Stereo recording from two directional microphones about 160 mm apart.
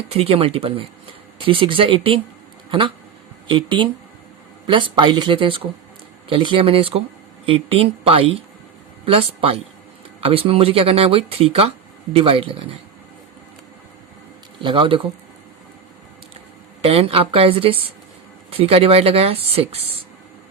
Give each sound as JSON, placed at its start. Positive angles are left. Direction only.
{"t": 0.1, "sound": "speech", "side_deg": -40}
{"t": 14.6, "sound": "speech", "side_deg": -30}
{"t": 16.8, "sound": "speech", "side_deg": -35}